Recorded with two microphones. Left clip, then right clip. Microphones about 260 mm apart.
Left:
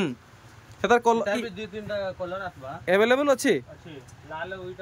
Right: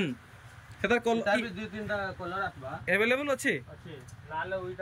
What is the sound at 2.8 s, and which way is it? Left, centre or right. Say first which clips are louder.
Speech: left 6 dB; centre.